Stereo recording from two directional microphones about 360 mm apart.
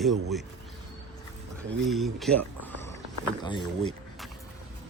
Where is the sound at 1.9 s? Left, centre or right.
Centre.